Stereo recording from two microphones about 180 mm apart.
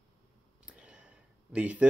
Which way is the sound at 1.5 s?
5° right (ahead or behind).